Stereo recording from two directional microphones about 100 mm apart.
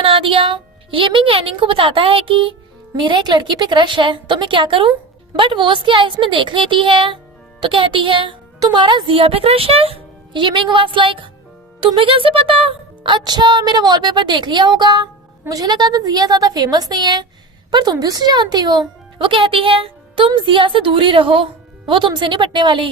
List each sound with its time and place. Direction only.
0.0 s a woman's voice: 65° right (ahead or behind)